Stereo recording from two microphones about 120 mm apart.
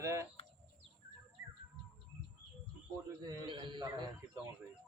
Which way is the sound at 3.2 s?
40° right (ahead or behind).